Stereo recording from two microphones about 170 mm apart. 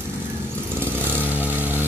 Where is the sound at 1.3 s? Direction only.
10° right (ahead or behind).